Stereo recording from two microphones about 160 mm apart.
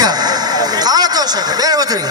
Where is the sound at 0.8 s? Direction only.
25° right (ahead or behind).